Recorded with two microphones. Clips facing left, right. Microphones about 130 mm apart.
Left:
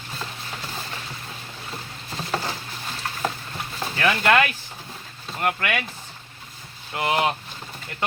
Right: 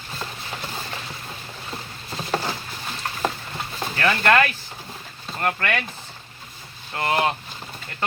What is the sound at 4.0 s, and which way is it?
Speech, 15° left (ahead or behind).